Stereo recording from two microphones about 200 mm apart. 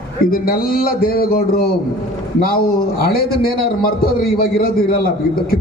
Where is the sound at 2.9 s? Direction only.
50° left (ahead or behind).